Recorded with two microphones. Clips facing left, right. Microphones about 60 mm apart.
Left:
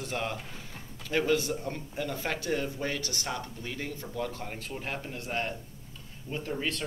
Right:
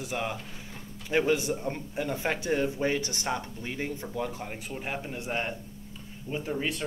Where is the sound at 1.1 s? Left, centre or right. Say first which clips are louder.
Right 2 dB; right.